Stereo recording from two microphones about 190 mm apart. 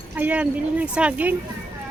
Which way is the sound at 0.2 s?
10° right (ahead or behind).